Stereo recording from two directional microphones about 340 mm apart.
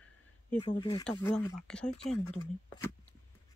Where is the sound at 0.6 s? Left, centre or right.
Centre.